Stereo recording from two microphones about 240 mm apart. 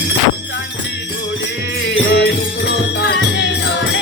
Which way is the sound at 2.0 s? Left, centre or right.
Left.